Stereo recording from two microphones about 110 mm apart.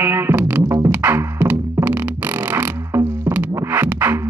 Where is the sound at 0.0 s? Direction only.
20° right (ahead or behind).